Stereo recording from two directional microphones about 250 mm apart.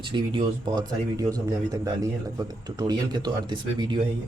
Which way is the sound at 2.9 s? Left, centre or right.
Centre.